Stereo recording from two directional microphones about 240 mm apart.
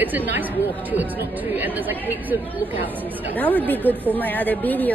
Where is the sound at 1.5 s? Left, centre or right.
Centre.